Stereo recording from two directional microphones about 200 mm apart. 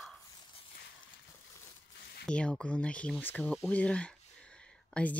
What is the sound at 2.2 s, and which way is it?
Speech, 5° left (ahead or behind).